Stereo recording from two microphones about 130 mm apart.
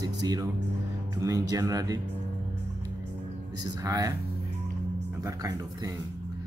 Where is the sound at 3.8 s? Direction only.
25° right (ahead or behind).